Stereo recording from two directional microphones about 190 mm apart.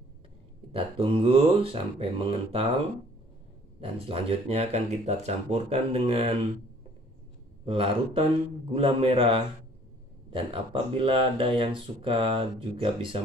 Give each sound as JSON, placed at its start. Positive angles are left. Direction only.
{"t": 0.7, "sound": "speech", "side_deg": -30}
{"t": 4.0, "sound": "speech", "side_deg": -30}
{"t": 7.6, "sound": "speech", "side_deg": -30}